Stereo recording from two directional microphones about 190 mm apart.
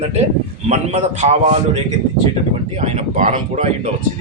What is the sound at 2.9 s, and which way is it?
Speech, 40° right (ahead or behind).